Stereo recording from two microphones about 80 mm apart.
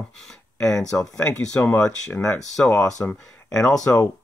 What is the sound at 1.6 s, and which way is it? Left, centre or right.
Speech, left.